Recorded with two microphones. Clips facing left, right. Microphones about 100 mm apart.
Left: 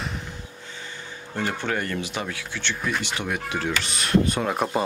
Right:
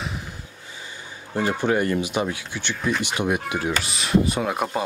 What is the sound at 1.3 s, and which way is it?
Speech, 15° right (ahead or behind).